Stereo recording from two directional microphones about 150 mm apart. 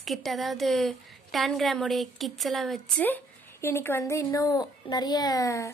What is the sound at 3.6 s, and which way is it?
A woman's voice, 15° left (ahead or behind).